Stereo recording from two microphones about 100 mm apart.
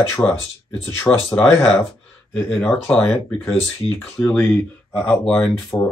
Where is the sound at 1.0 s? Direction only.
5° left (ahead or behind).